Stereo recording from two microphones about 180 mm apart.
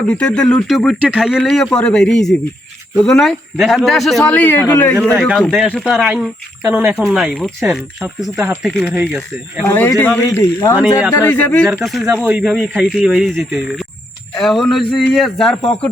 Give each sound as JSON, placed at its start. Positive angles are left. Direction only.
{"t": 0.1, "sound": "speech", "side_deg": 5}
{"t": 9.6, "sound": "speech", "side_deg": 15}